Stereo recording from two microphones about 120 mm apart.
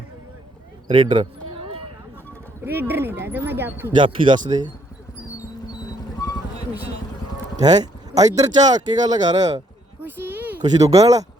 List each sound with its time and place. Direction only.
0.9 s a sound: 45° right (ahead or behind)
2.6 s speech: 20° right (ahead or behind)
3.9 s speech: 40° right (ahead or behind)
7.6 s speech: 35° right (ahead or behind)
10.0 s a sound: 15° right (ahead or behind)
10.6 s speech: 30° right (ahead or behind)